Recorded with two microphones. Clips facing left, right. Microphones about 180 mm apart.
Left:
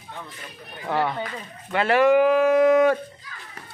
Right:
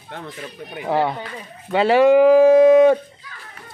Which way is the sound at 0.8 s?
25° right (ahead or behind).